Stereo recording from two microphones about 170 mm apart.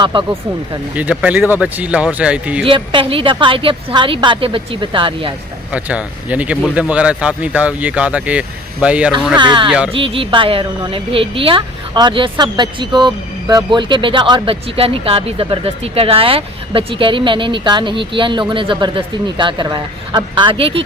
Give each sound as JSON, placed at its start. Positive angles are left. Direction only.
{"t": 0.0, "sound": "a woman's voice", "side_deg": -30}
{"t": 0.9, "sound": "speech", "side_deg": -10}
{"t": 2.6, "sound": "speech", "side_deg": -30}
{"t": 5.7, "sound": "speech", "side_deg": -5}
{"t": 9.4, "sound": "a woman's voice", "side_deg": -25}
{"t": 9.6, "sound": "speech", "side_deg": -5}
{"t": 9.9, "sound": "a woman's voice", "side_deg": -30}